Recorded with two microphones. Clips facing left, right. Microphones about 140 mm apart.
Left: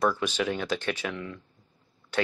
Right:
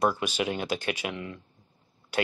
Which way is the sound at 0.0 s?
15° right (ahead or behind).